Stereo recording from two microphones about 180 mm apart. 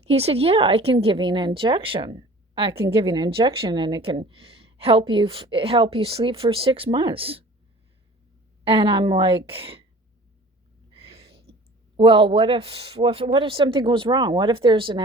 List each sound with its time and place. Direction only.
0.0 s speech: 35° right (ahead or behind)
8.6 s speech: 30° right (ahead or behind)
10.9 s a sound: 30° right (ahead or behind)
11.9 s speech: 30° right (ahead or behind)